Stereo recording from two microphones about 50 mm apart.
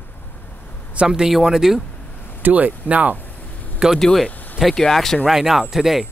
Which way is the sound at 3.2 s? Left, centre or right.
Left.